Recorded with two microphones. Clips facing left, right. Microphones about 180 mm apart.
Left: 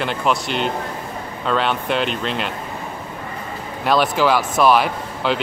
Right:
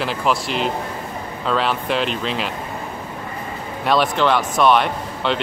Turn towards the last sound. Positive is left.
turn(degrees=5)  # may be behind; listen again after turning